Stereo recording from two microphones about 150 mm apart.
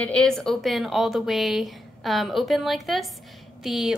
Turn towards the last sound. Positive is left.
turn(degrees=0)  # may be behind; listen again after turning